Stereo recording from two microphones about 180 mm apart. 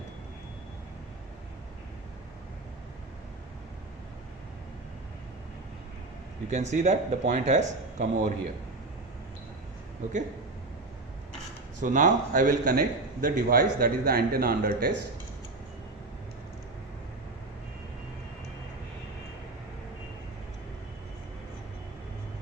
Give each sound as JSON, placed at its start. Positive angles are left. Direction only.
{"t": 6.5, "sound": "a man's voice", "side_deg": -40}
{"t": 11.8, "sound": "a man's voice", "side_deg": -45}